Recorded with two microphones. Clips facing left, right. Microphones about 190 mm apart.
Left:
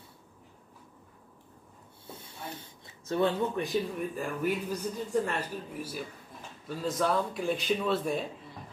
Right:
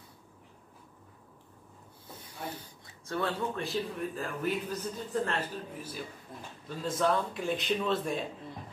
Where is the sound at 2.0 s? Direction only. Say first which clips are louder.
Right 1 dB; 25° left (ahead or behind).